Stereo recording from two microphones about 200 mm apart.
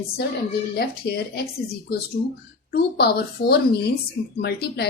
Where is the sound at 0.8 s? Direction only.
55° left (ahead or behind).